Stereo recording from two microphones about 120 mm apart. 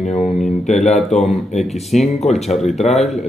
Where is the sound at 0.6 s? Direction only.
70° left (ahead or behind).